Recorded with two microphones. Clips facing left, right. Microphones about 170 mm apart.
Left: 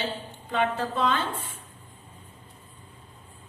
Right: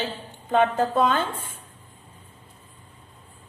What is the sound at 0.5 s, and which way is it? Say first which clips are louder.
A woman's voice: right 6 dB; 50° right (ahead or behind).